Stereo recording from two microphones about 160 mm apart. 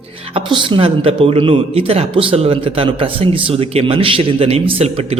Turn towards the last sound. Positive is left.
turn(degrees=-40)  # may be behind; listen again after turning